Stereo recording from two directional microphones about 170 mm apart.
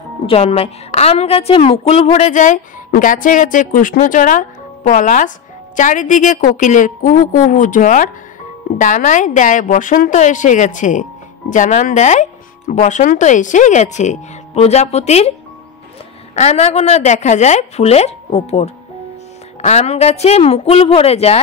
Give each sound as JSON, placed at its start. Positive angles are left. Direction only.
{"t": 0.3, "sound": "a woman's voice", "side_deg": 35}
{"t": 16.3, "sound": "speech", "side_deg": 40}